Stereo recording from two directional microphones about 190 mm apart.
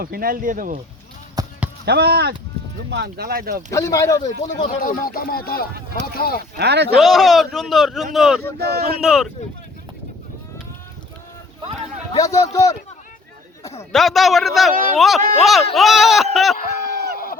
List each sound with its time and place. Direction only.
0.0 s speech: 50° right (ahead or behind)
1.4 s basketball bounce: 20° right (ahead or behind)
1.8 s speech: 60° right (ahead or behind)
3.7 s speech: 15° left (ahead or behind)
4.4 s speech: 35° left (ahead or behind); by 6.4 s 50° left (ahead or behind)
6.6 s speech: 60° right (ahead or behind)
7.0 s a man's voice: centre (ahead or behind)
8.5 s speech: 55° right (ahead or behind)
9.0 s a man's voice: centre (ahead or behind)
12.2 s speech: 15° left (ahead or behind)
13.9 s a man's voice: centre (ahead or behind)
16.6 s a sound: 45° left (ahead or behind)